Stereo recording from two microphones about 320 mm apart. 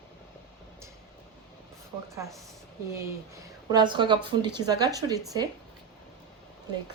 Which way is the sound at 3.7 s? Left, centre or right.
Centre.